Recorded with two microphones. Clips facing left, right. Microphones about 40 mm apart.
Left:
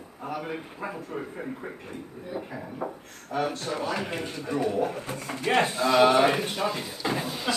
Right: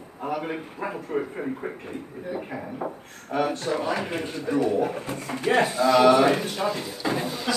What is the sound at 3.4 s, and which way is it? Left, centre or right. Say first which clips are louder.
A man's voice: right 4 dB; centre.